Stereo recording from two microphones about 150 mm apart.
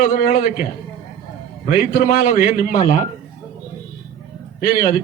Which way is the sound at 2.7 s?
50° left (ahead or behind).